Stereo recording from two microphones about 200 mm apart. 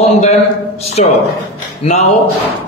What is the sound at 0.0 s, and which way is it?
A man's voice, 35° left (ahead or behind).